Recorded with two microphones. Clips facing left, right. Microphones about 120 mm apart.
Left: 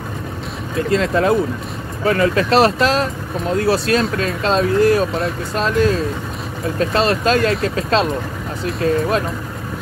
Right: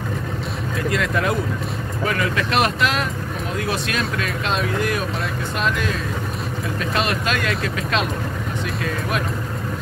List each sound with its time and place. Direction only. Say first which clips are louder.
0.7 s speech: left 6 dB; 30° left (ahead or behind)